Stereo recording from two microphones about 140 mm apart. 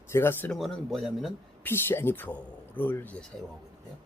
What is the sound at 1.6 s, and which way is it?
Speech, 15° left (ahead or behind).